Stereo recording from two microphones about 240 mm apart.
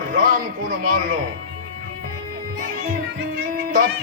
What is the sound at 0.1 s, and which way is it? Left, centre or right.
Speech, right.